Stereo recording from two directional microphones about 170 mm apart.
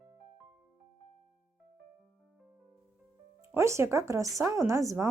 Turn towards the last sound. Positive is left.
turn(degrees=-20)  # may be behind; listen again after turning